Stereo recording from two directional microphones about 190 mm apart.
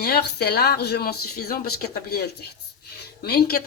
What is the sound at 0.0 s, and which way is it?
A woman's voice, 55° left (ahead or behind).